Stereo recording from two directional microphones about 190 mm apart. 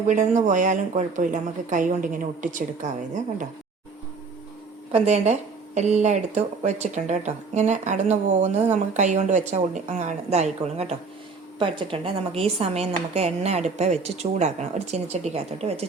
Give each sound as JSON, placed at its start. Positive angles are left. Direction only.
{"t": 0.1, "sound": "speech", "side_deg": -40}
{"t": 4.9, "sound": "speech", "side_deg": -35}